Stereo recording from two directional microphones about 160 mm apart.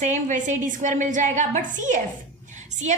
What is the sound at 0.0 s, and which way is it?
A woman's voice, 50° right (ahead or behind).